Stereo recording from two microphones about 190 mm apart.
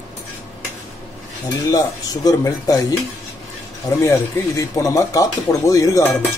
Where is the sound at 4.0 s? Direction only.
15° left (ahead or behind).